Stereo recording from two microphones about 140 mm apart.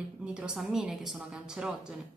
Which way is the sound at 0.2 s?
5° right (ahead or behind).